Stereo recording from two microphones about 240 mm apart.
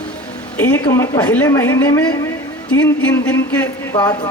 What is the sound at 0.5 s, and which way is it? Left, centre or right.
Speech, centre.